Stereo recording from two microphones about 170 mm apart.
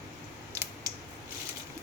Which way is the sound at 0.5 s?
20° right (ahead or behind).